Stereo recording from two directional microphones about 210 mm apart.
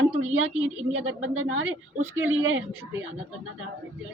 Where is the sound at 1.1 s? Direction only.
75° right (ahead or behind).